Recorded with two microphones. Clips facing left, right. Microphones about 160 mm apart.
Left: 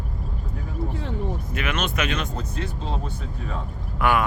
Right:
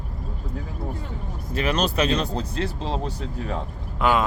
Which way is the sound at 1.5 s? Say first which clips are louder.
Right 6 dB; 35° right (ahead or behind).